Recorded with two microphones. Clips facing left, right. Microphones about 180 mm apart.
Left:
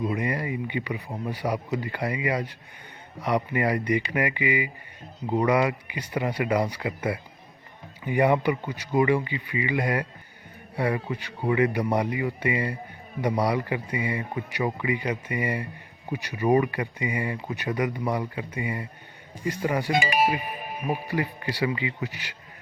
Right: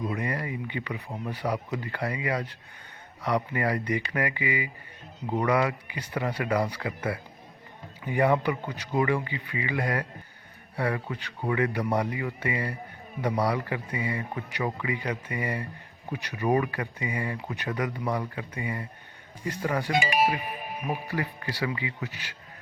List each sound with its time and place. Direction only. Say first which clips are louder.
0.0 s speech: left 3 dB; 15° left (ahead or behind)
16.1 s speech: left 3 dB; 5° left (ahead or behind)
16.5 s speech: left 4 dB; 15° left (ahead or behind)